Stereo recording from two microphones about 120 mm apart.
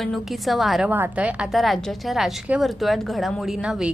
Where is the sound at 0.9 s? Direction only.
15° right (ahead or behind).